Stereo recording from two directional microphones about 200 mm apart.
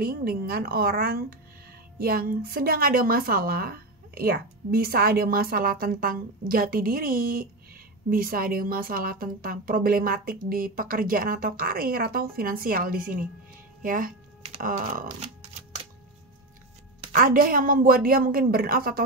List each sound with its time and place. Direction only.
0.0 s a woman's voice: 50° right (ahead or behind)
17.1 s a woman's voice: 45° right (ahead or behind)